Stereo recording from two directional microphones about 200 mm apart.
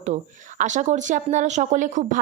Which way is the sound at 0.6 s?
35° right (ahead or behind).